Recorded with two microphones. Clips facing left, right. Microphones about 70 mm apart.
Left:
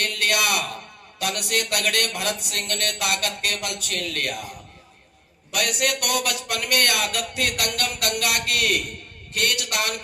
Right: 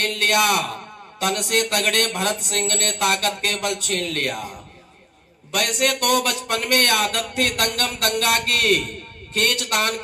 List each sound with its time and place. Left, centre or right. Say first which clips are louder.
0.0 s a man's voice: right 4 dB; right
5.5 s speech: right 3 dB; right